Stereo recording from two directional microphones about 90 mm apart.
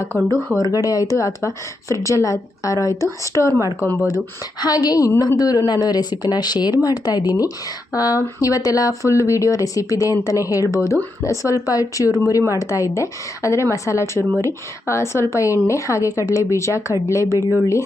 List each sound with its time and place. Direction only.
0.1 s speech: 30° left (ahead or behind)
0.6 s speech: 40° left (ahead or behind)
4.6 s speech: 45° left (ahead or behind)